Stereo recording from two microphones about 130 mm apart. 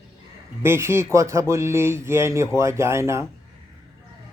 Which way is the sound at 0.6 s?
20° right (ahead or behind).